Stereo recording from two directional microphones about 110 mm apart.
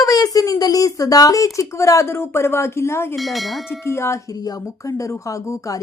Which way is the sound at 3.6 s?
25° left (ahead or behind).